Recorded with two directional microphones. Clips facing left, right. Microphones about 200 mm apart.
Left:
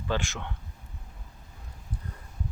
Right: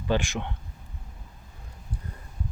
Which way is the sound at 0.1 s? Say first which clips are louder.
Right 5 dB; 15° right (ahead or behind).